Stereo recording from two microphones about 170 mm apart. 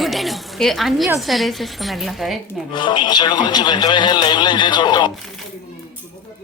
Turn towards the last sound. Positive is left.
turn(degrees=25)  # may be behind; listen again after turning